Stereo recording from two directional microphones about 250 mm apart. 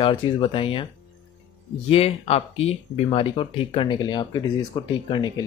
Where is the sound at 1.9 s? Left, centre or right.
Left.